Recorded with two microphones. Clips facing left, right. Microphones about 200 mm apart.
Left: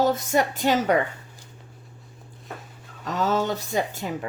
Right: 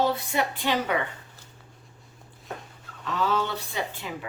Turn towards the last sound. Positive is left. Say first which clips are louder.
# left 6 dB
turn(degrees=45)  # may be behind; listen again after turning